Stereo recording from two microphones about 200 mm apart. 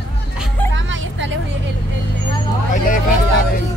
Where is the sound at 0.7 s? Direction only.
65° right (ahead or behind).